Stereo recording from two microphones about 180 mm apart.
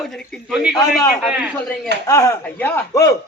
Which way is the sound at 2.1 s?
15° left (ahead or behind).